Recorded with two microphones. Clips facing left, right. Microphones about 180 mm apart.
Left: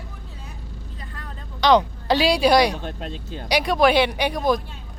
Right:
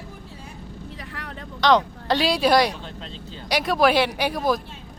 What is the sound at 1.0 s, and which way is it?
Vehicle, 80° right.